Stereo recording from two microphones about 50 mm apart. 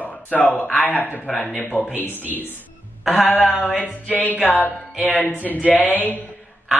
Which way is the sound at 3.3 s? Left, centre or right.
Left.